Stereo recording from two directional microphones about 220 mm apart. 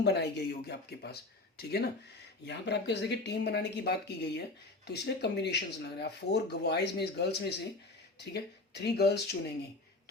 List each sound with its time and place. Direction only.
0.0 s speech: 50° left (ahead or behind)